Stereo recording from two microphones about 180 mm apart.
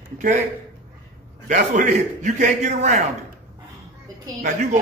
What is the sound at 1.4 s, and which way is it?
A man's voice, 40° right (ahead or behind).